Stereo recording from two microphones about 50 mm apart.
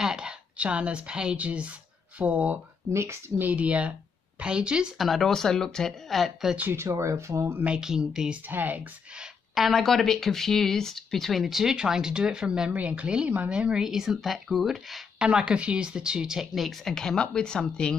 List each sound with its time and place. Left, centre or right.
0.0 s a sound: centre
0.6 s a woman's voice: right
2.9 s speech: right
3.3 s a woman's voice: right
4.9 s speech: centre
6.7 s speech: right
7.8 s speech: centre
8.5 s speech: right
9.6 s speech: centre
11.6 s a woman's voice: centre
13.8 s speech: centre
15.1 s speech: centre
16.8 s speech: centre